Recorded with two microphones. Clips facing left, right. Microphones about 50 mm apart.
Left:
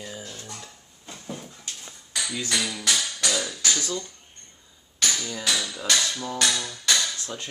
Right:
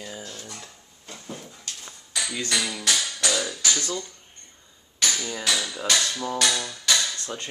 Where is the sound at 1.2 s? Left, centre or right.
Centre.